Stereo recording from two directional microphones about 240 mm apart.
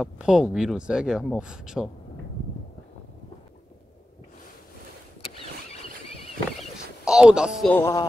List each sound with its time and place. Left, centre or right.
0.0 s speech: centre
7.1 s speech: centre
7.7 s music: centre